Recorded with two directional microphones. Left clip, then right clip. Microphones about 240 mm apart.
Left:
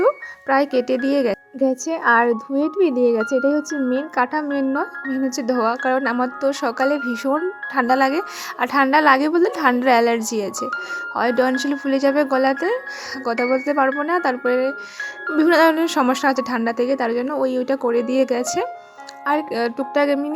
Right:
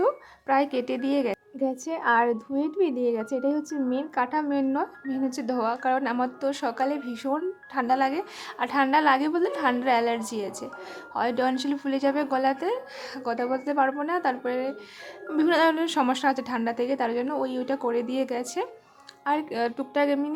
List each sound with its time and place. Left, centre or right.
0.0 s music: centre
1.9 s speech: left